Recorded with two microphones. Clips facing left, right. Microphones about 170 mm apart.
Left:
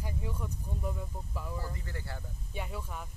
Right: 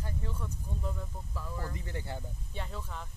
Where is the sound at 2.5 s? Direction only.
10° left (ahead or behind).